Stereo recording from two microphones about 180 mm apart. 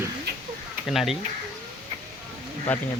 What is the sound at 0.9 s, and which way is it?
Speech, centre (ahead or behind).